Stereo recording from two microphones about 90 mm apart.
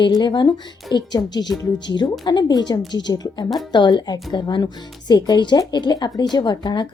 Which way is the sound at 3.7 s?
55° left (ahead or behind).